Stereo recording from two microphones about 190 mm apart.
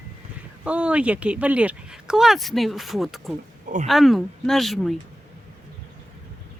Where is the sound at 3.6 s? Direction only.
40° right (ahead or behind).